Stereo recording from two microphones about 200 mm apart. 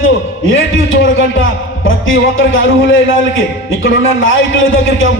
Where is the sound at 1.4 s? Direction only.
75° left (ahead or behind).